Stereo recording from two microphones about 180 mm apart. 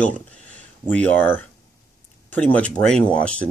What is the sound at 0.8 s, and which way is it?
Speech, 10° left (ahead or behind).